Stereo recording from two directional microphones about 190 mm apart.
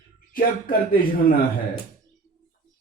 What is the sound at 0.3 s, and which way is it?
Speech, 50° left (ahead or behind).